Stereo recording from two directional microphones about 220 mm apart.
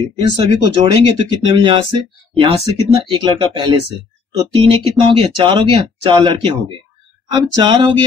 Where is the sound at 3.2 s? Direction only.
20° right (ahead or behind).